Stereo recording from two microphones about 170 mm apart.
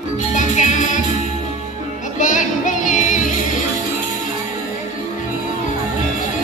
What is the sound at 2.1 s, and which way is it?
Music, 45° left (ahead or behind).